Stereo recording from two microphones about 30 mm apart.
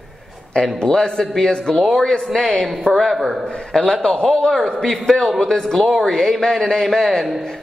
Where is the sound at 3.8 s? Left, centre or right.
Left.